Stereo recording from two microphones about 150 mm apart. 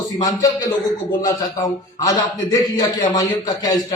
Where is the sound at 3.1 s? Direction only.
25° left (ahead or behind).